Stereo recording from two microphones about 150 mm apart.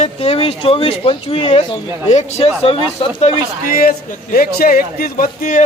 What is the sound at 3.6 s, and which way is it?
A man's voice, 70° left (ahead or behind).